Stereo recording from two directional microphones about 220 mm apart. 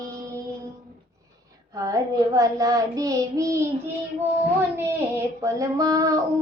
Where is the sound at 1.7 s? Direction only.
15° right (ahead or behind).